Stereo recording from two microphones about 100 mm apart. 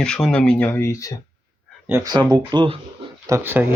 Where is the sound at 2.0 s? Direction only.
40° right (ahead or behind).